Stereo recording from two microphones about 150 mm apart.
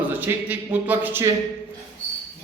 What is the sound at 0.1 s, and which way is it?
Speech, 10° right (ahead or behind).